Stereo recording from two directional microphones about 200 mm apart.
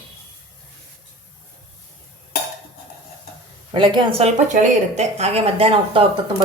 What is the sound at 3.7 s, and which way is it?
Speech, 25° right (ahead or behind).